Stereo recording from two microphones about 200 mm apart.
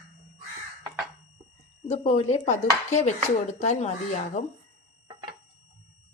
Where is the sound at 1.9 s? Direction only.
30° left (ahead or behind).